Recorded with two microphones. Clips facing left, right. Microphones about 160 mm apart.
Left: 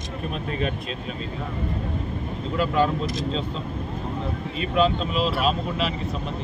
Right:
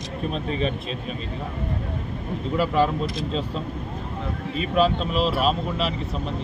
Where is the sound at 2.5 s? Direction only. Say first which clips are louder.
Right 1 dB; 5° right (ahead or behind).